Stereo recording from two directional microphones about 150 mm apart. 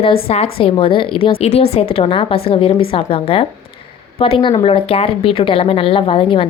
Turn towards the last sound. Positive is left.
turn(degrees=35)  # may be behind; listen again after turning